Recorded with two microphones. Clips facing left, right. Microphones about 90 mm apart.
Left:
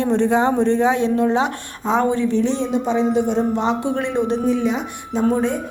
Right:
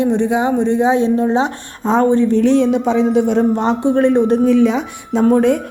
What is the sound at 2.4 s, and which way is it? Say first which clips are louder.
Speech: right 7 dB; 60° right (ahead or behind).